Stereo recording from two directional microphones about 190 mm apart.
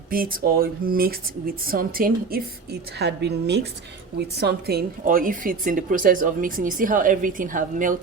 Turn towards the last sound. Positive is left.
turn(degrees=-45)  # may be behind; listen again after turning